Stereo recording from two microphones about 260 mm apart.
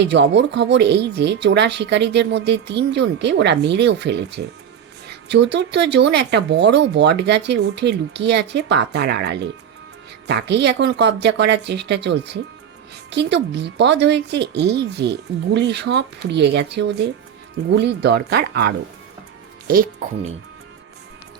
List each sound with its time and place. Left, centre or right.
0.0 s speech: right